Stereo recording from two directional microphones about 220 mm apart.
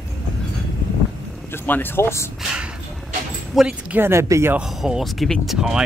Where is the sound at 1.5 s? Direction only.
10° left (ahead or behind).